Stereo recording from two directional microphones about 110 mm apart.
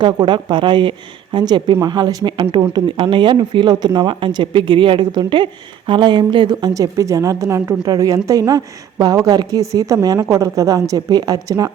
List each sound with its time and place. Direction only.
0.0 s a woman's voice: 45° right (ahead or behind)